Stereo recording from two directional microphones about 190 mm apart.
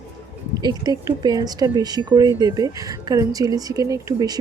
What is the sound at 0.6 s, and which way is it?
Speech, 20° right (ahead or behind).